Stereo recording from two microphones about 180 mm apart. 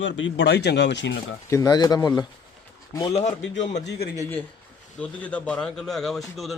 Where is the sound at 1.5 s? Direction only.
20° left (ahead or behind).